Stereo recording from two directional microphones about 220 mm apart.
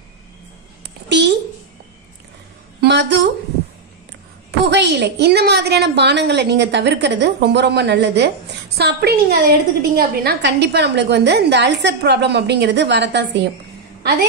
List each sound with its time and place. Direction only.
0.8 s a sound: 50° right (ahead or behind)
2.8 s a woman's voice: 50° right (ahead or behind)
4.5 s a woman's voice: 50° right (ahead or behind)